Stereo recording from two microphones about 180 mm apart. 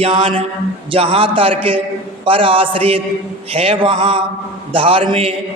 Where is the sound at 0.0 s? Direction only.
30° right (ahead or behind).